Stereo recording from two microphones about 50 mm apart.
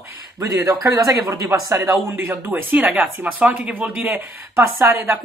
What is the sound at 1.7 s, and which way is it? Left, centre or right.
Speech, right.